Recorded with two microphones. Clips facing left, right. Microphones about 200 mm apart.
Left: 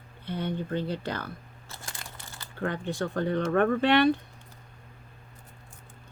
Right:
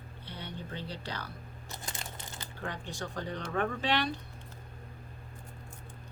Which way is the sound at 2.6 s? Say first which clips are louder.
Left 9 dB; 55° left (ahead or behind).